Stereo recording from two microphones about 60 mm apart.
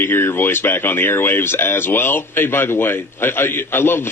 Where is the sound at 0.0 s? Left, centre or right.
Left.